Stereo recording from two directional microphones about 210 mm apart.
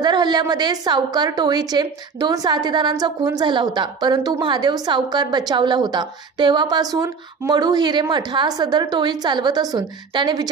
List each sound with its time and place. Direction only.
0.0 s a woman's voice: 20° right (ahead or behind)